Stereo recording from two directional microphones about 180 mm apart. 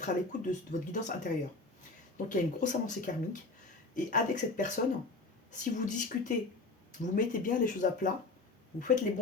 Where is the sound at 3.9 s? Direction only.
45° left (ahead or behind).